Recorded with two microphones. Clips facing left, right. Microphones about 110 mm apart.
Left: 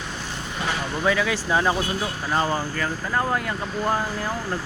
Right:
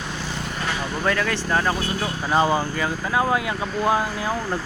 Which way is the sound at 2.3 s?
15° right (ahead or behind).